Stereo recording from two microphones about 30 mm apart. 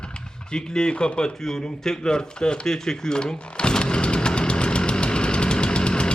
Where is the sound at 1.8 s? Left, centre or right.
Left.